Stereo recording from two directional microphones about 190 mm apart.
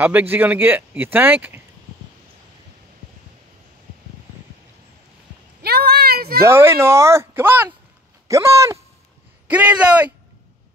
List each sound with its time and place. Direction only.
0.0 s speech: 10° right (ahead or behind)
5.6 s a sound: 55° right (ahead or behind)
6.4 s speech: 15° right (ahead or behind)